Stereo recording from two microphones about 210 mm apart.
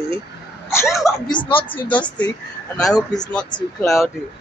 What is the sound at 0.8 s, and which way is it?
Speech, 15° left (ahead or behind).